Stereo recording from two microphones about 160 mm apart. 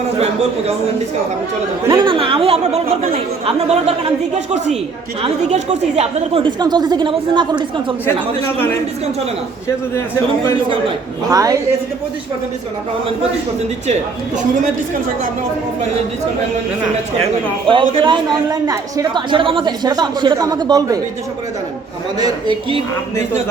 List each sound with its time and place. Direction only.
2.0 s speech: 30° right (ahead or behind)
11.3 s a woman's voice: 20° right (ahead or behind)
17.7 s a woman's voice: 30° right (ahead or behind)
22.2 s a woman's voice: 25° right (ahead or behind)